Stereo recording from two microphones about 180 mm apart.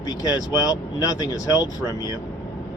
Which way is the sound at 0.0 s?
20° left (ahead or behind).